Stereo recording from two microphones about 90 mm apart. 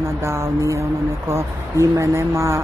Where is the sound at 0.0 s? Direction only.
30° right (ahead or behind).